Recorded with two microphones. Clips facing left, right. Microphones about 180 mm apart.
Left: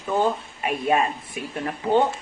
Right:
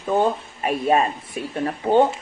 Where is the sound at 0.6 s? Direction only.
35° right (ahead or behind).